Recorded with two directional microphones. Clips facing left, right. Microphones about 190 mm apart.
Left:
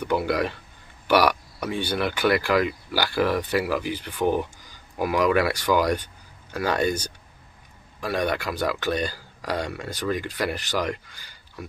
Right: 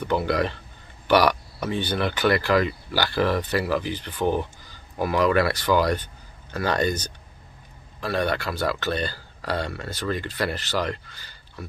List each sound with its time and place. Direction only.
0.0 s speech: 10° left (ahead or behind)